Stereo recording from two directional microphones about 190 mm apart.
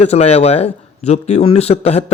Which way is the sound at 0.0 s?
35° left (ahead or behind).